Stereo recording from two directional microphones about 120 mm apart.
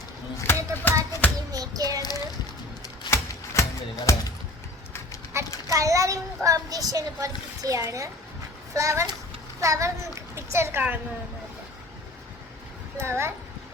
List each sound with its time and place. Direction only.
0.4 s music: 15° left (ahead or behind)
1.5 s a sound: 30° right (ahead or behind)
2.0 s a sound: 35° left (ahead or behind)
3.1 s music: 25° left (ahead or behind)
5.6 s a child's voice: 25° right (ahead or behind)
13.0 s a child's voice: 20° right (ahead or behind)